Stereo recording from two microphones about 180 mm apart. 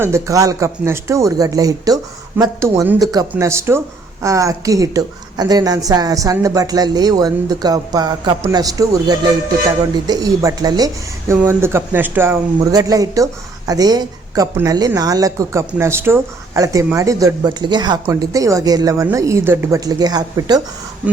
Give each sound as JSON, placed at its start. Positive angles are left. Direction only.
{"t": 0.0, "sound": "speech", "side_deg": -15}